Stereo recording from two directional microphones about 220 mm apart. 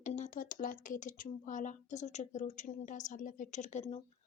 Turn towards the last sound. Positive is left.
turn(degrees=30)  # may be behind; listen again after turning